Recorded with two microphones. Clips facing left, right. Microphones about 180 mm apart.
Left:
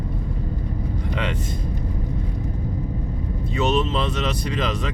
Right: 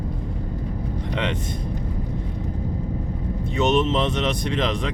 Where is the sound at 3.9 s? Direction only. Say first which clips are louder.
Right 2 dB; 20° right (ahead or behind).